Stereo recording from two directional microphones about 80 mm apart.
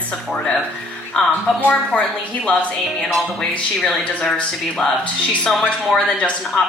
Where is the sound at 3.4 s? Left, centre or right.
Centre.